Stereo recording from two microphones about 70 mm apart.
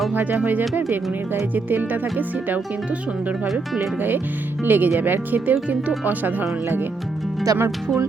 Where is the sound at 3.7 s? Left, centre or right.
Right.